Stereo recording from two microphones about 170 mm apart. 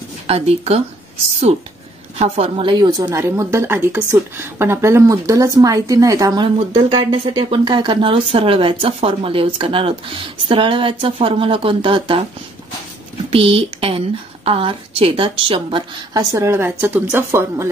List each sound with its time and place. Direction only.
0.3 s speech: 35° right (ahead or behind)
2.1 s a woman's voice: 35° right (ahead or behind)
13.3 s speech: 35° right (ahead or behind); by 17.6 s 15° right (ahead or behind)